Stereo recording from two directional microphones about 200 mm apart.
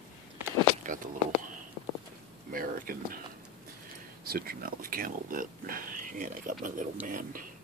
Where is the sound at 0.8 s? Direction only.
40° right (ahead or behind).